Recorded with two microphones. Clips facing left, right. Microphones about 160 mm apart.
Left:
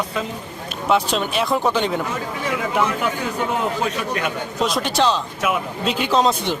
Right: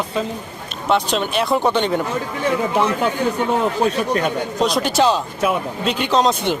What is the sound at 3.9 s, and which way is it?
Speech, 35° right (ahead or behind).